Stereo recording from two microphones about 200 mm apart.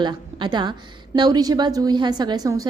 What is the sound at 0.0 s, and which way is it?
A woman's voice, 20° right (ahead or behind).